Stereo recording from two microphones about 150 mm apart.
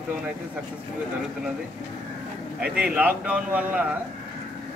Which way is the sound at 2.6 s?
10° right (ahead or behind).